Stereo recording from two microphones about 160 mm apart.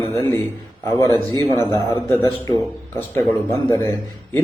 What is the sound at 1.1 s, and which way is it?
Speech, 30° right (ahead or behind).